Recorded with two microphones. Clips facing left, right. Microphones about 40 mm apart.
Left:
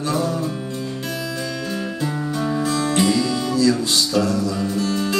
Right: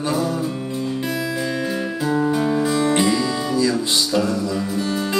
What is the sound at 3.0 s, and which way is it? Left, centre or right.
Music, centre.